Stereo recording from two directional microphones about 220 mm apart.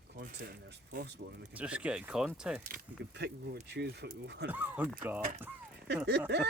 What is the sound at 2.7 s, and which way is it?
Speech, 45° right (ahead or behind).